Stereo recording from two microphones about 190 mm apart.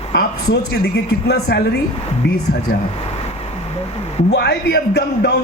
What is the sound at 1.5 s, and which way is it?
Speech, 60° left (ahead or behind).